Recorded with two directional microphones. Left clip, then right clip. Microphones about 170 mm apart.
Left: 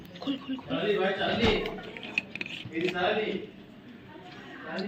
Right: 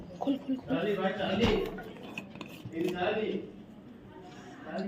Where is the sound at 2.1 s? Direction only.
50° right (ahead or behind).